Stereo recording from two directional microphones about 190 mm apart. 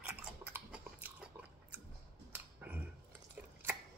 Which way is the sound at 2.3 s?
10° right (ahead or behind).